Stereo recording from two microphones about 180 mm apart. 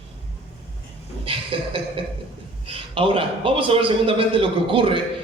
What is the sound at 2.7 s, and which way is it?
A man's voice, 30° right (ahead or behind).